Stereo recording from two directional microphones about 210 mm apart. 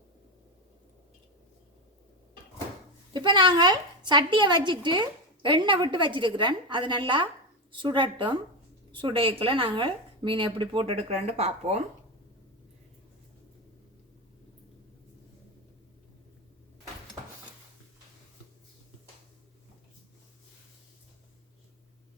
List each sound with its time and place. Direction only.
3.1 s a woman's voice: 20° right (ahead or behind)